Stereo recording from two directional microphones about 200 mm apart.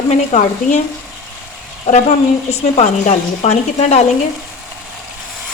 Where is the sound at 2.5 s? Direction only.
30° left (ahead or behind).